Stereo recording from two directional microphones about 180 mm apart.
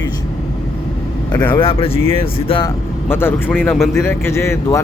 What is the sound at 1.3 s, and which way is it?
Speech, 25° left (ahead or behind).